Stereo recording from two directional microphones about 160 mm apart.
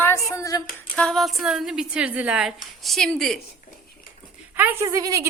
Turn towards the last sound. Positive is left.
turn(degrees=-20)  # may be behind; listen again after turning